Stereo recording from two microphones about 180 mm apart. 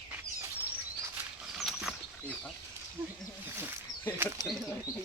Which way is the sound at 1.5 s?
Centre (ahead or behind).